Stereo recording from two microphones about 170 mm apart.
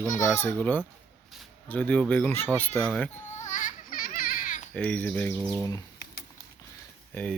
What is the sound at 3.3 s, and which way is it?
Baby cry, 45° left (ahead or behind).